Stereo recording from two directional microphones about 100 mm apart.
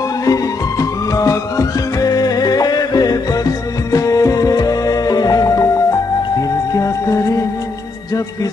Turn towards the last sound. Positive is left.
turn(degrees=30)  # may be behind; listen again after turning